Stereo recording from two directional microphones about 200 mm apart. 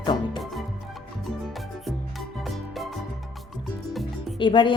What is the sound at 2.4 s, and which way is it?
Music, centre (ahead or behind).